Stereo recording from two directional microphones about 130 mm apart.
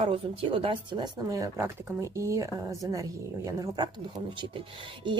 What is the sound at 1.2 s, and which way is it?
Speech, 25° right (ahead or behind).